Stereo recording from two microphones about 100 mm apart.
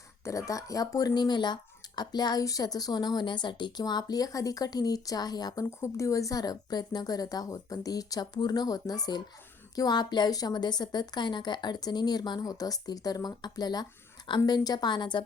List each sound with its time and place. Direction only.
0.3 s a woman's voice: 35° left (ahead or behind); by 15.2 s 50° left (ahead or behind)